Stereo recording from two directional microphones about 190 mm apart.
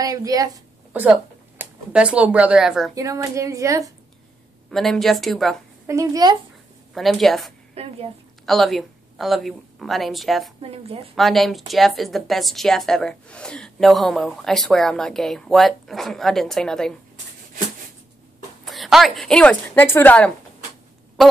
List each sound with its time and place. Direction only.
0.0 s speech: 20° right (ahead or behind); by 2.9 s 5° right (ahead or behind)
2.9 s speech: 15° right (ahead or behind)
4.6 s a woman's voice: centre (ahead or behind)
5.9 s speech: 20° right (ahead or behind)
6.9 s a woman's voice: centre (ahead or behind)
7.7 s a woman's voice: 30° right (ahead or behind)
8.5 s a woman's voice: centre (ahead or behind)
10.6 s a woman's voice: 30° right (ahead or behind)
11.1 s a woman's voice: centre (ahead or behind)
18.7 s a woman's voice: centre (ahead or behind)